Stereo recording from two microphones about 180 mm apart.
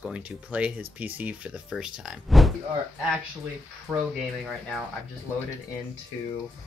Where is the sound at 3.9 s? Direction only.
10° right (ahead or behind).